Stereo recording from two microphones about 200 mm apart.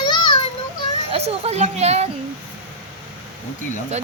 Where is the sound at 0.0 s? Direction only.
20° left (ahead or behind).